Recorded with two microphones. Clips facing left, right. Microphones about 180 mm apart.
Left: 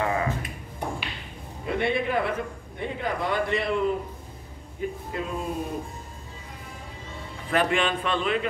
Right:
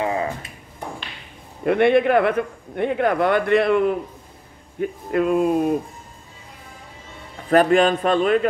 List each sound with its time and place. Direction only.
0.0 s a sound: 25° right (ahead or behind)
1.6 s a man's voice: 60° right (ahead or behind)
7.4 s a man's voice: 45° right (ahead or behind)